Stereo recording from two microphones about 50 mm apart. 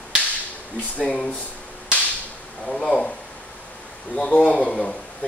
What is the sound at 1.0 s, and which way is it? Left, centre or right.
Speech, left.